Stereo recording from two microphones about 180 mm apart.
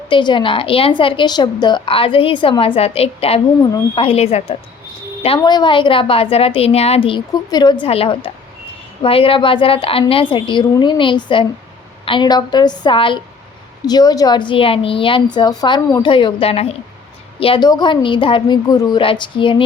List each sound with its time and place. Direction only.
0.1 s a woman's voice: 25° left (ahead or behind)